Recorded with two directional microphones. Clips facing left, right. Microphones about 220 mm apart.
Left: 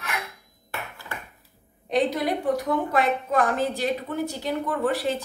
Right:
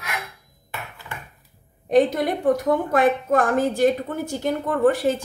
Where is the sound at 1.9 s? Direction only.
50° right (ahead or behind).